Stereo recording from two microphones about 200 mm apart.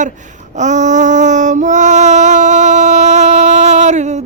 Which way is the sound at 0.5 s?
35° right (ahead or behind).